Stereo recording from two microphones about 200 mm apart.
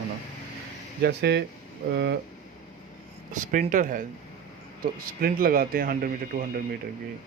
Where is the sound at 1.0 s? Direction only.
60° right (ahead or behind).